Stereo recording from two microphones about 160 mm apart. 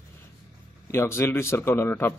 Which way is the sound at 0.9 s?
15° left (ahead or behind).